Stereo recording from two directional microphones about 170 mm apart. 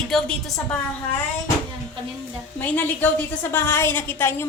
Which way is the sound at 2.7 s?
10° left (ahead or behind).